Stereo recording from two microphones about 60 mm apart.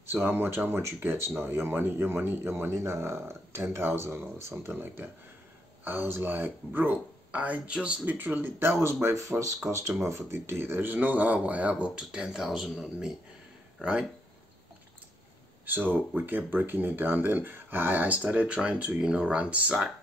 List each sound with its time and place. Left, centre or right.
0.0 s speech: right; by 7.9 s centre
8.0 s speech: right
8.8 s speech: right
10.0 s speech: right; by 13.1 s centre
15.6 s speech: right